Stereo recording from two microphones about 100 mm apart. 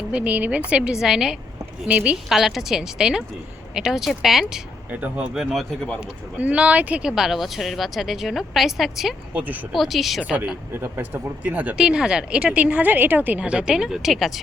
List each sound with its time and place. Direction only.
0.1 s speech: 15° right (ahead or behind)
2.3 s speech: 5° right (ahead or behind)
4.9 s speech: 15° right (ahead or behind)
6.0 s speech: 10° right (ahead or behind)
9.3 s speech: 15° right (ahead or behind)
9.7 s speech: centre (ahead or behind)
10.7 s speech: 25° right (ahead or behind); by 14.4 s centre (ahead or behind)